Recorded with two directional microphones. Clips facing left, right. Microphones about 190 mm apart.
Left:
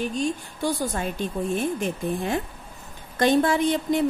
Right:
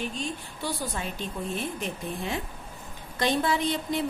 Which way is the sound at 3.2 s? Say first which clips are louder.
Left 6 dB; 50° left (ahead or behind).